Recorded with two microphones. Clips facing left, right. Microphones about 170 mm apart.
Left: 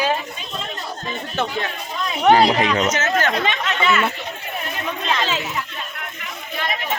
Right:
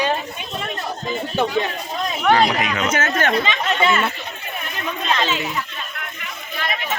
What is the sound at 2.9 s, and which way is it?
Speech, 55° right (ahead or behind).